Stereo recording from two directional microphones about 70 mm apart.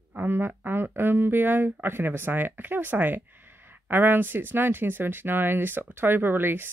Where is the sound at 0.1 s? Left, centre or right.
Right.